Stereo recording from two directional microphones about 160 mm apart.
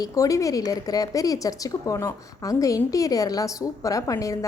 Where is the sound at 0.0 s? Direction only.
20° left (ahead or behind).